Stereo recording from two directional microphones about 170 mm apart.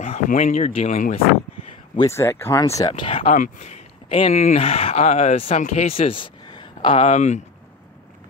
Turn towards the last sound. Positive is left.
turn(degrees=45)  # may be behind; listen again after turning